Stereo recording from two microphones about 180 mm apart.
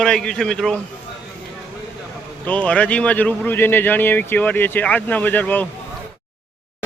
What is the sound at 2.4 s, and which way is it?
Speech, 10° left (ahead or behind).